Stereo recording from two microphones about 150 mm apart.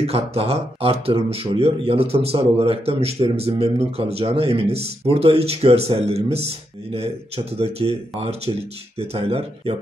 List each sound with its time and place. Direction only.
0.0 s speech: 40° right (ahead or behind)